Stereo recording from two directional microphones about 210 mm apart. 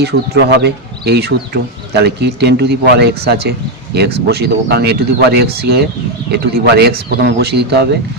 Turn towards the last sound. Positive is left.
turn(degrees=-50)  # may be behind; listen again after turning